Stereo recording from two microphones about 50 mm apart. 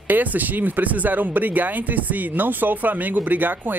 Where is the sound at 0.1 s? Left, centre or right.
Right.